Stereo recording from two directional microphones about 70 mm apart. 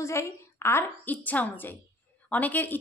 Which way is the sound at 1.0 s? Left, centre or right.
Left.